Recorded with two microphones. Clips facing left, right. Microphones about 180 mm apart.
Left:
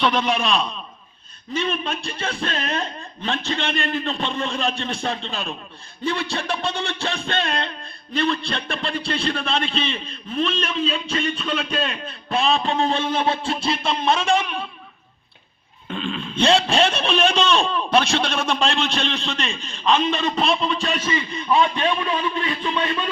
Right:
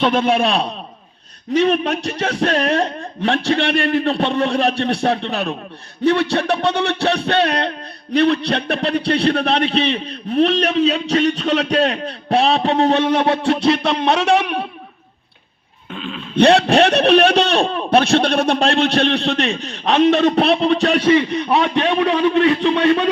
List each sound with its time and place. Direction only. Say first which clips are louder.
0.0 s a man's voice: right 5 dB; 50° right (ahead or behind)
1.5 s a man's voice: right 9 dB; 75° right (ahead or behind)
15.9 s a sound: left 1 dB; 5° right (ahead or behind)
16.3 s a man's voice: right 7 dB; 65° right (ahead or behind)